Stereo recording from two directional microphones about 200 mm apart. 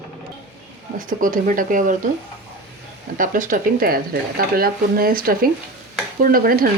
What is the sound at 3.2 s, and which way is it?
A woman's voice, 40° right (ahead or behind).